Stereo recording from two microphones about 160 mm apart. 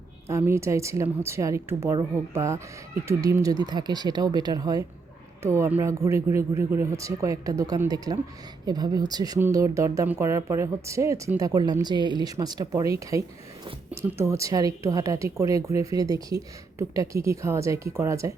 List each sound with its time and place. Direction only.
0.3 s a woman's voice: 15° right (ahead or behind)